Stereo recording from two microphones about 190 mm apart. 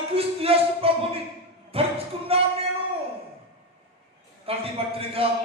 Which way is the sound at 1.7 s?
30° right (ahead or behind).